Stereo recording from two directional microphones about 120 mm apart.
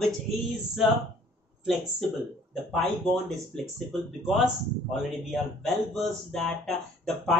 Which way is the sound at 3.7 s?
Centre (ahead or behind).